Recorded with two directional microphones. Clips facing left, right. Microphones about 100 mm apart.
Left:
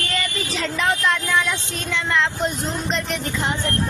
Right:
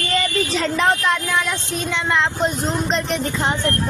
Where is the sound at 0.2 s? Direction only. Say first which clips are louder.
Right 5 dB; 35° right (ahead or behind).